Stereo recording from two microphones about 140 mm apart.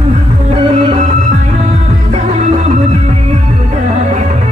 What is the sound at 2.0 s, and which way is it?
Music, 55° right (ahead or behind).